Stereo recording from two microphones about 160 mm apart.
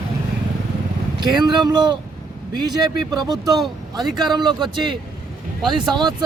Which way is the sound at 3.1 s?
25° right (ahead or behind).